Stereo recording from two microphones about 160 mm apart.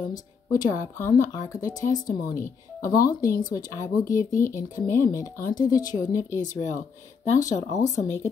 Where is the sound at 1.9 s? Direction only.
55° left (ahead or behind).